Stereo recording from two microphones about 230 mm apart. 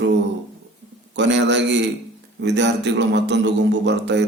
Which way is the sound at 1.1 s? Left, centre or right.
Right.